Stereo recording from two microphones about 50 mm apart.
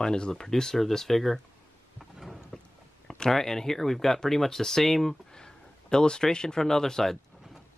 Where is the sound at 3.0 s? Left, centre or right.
Centre.